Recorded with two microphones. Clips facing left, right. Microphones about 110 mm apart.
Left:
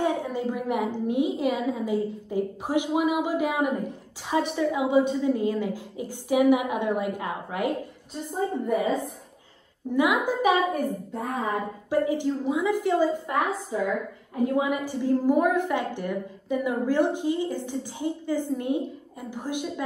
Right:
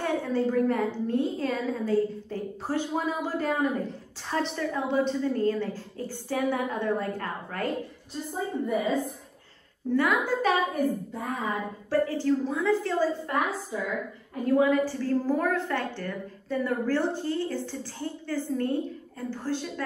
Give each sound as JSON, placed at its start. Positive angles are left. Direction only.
{"t": 0.0, "sound": "a woman's voice", "side_deg": 15}
{"t": 8.6, "sound": "a woman's voice", "side_deg": 0}
{"t": 9.9, "sound": "a woman's voice", "side_deg": 15}
{"t": 11.9, "sound": "a woman's voice", "side_deg": 15}